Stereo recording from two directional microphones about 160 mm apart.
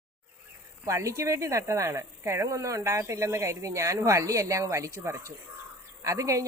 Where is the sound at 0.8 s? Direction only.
20° right (ahead or behind).